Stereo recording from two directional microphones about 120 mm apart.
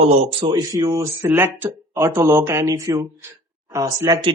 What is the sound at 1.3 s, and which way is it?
Speech, 15° right (ahead or behind).